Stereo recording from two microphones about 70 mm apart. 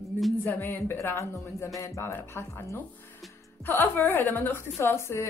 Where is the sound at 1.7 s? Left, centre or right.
Left.